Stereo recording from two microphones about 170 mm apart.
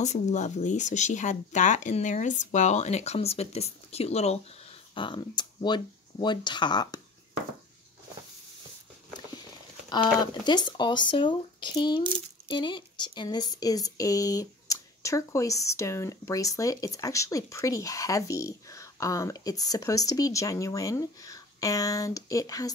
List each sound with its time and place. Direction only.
0.0 s speech: 45° left (ahead or behind); by 7.0 s 25° left (ahead or behind)
9.8 s speech: 25° left (ahead or behind)